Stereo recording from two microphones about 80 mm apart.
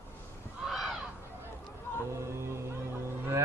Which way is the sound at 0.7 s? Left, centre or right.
Centre.